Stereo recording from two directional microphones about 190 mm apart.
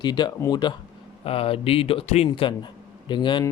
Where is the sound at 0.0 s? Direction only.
20° left (ahead or behind).